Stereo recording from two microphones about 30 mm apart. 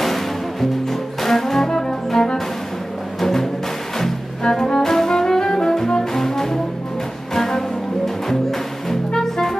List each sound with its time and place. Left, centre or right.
0.0 s music: centre
9.1 s music: centre